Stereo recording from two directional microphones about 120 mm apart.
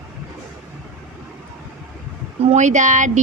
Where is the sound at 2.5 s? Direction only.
85° right.